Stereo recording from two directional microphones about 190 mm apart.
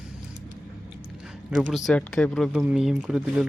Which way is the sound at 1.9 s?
5° left (ahead or behind).